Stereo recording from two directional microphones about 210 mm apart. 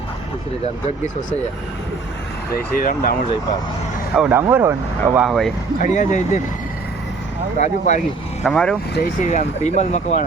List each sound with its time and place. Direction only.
2.7 s speech: 45° left (ahead or behind)
4.1 s speech: 5° right (ahead or behind)
5.8 s speech: 35° left (ahead or behind)
7.6 s speech: 35° left (ahead or behind)
8.4 s speech: 5° left (ahead or behind)
9.0 s speech: 35° left (ahead or behind)